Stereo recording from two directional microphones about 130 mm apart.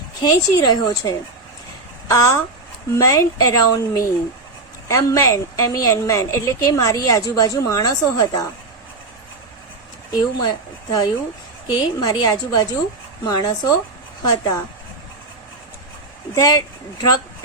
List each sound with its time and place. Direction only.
0.2 s a woman's voice: 30° left (ahead or behind)
10.1 s a woman's voice: 30° left (ahead or behind)
16.3 s a woman's voice: 25° left (ahead or behind)